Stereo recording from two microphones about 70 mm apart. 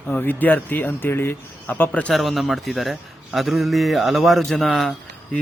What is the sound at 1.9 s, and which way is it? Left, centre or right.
Speech, centre.